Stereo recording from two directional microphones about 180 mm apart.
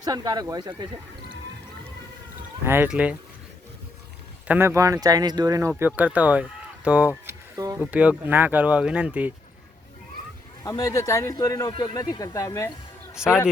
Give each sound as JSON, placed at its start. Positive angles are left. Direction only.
{"t": 0.0, "sound": "speech", "side_deg": -20}
{"t": 2.6, "sound": "speech", "side_deg": -10}
{"t": 4.4, "sound": "speech", "side_deg": -10}
{"t": 7.5, "sound": "a sound", "side_deg": -20}
{"t": 7.9, "sound": "speech", "side_deg": -10}
{"t": 10.6, "sound": "speech", "side_deg": 20}
{"t": 13.2, "sound": "a man's voice", "side_deg": -5}